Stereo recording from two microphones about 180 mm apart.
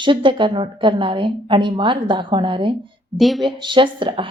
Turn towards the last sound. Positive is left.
turn(degrees=-30)  # may be behind; listen again after turning